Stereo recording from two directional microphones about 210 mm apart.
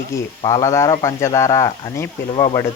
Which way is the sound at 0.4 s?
15° left (ahead or behind).